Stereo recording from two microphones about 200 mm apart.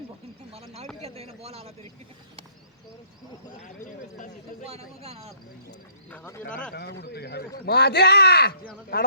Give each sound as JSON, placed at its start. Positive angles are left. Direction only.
{"t": 0.5, "sound": "a sound", "side_deg": -30}
{"t": 4.7, "sound": "speech", "side_deg": -30}
{"t": 6.1, "sound": "speech", "side_deg": 10}
{"t": 6.7, "sound": "speech", "side_deg": 55}